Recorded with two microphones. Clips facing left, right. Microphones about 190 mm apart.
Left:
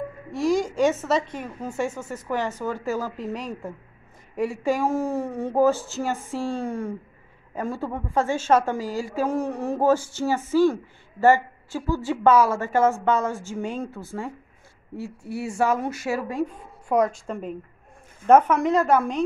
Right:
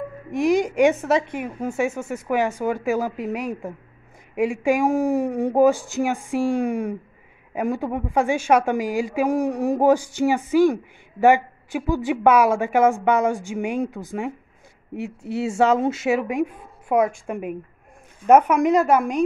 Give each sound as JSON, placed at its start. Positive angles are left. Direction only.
{"t": 0.3, "sound": "a woman's voice", "side_deg": -20}
{"t": 16.9, "sound": "a woman's voice", "side_deg": -5}